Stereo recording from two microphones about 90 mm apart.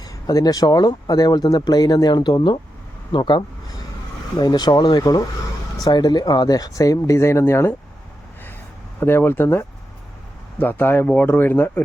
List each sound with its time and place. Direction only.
0.0 s speech: 45° left (ahead or behind); by 7.8 s 30° left (ahead or behind)
9.0 s speech: 25° left (ahead or behind)